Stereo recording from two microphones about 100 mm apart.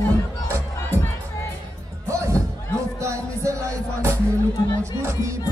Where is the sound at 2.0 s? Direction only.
30° right (ahead or behind).